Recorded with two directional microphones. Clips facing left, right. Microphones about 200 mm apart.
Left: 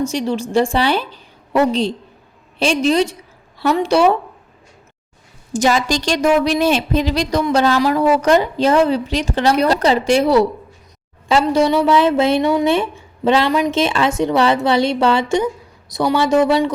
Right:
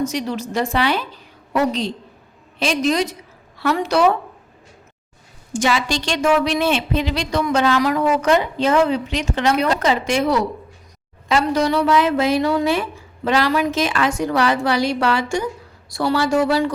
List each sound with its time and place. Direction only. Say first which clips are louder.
0.0 s a woman's voice: left 3 dB; 30° left (ahead or behind)
2.6 s a woman's voice: left 4 dB; 30° left (ahead or behind)
5.5 s a woman's voice: left 4 dB; 40° left (ahead or behind); by 16.7 s 20° left (ahead or behind)